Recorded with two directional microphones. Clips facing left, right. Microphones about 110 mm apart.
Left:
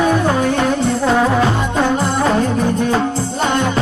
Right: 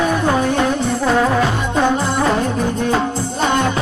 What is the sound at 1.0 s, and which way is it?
Music, 15° left (ahead or behind).